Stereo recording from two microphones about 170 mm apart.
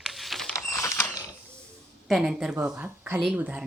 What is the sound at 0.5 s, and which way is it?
Mechanisms, 15° left (ahead or behind).